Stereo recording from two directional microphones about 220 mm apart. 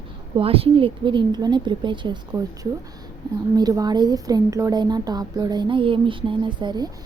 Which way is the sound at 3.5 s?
15° right (ahead or behind).